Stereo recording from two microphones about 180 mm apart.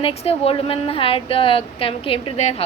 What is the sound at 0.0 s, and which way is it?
A woman's voice, 35° left (ahead or behind).